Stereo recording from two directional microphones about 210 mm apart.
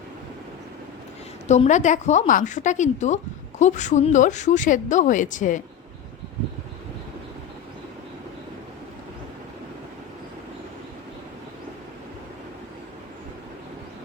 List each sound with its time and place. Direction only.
1.5 s a woman's voice: 35° left (ahead or behind)